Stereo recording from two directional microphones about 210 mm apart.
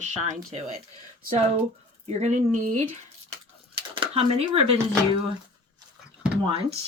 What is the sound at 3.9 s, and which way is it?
Speech, 25° right (ahead or behind).